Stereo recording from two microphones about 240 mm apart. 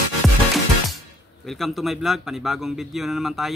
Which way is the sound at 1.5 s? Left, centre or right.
Centre.